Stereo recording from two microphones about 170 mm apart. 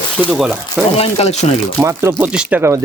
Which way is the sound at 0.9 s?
35° left (ahead or behind).